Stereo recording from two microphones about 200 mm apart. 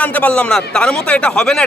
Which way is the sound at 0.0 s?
10° left (ahead or behind).